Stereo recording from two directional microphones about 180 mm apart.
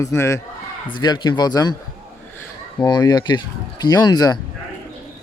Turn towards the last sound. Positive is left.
turn(degrees=20)  # may be behind; listen again after turning